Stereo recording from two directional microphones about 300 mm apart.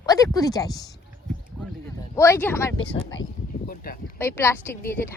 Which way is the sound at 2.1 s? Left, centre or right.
Centre.